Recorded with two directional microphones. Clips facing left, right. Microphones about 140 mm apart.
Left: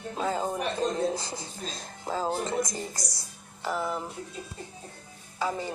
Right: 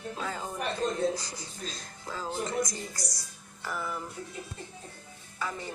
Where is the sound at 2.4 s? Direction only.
25° left (ahead or behind).